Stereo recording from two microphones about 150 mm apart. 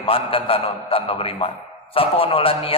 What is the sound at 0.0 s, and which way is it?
A man's voice, 35° left (ahead or behind).